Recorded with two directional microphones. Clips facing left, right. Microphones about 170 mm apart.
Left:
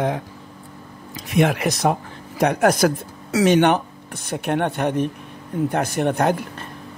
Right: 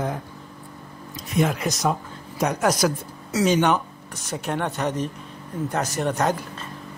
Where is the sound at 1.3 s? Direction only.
65° left (ahead or behind).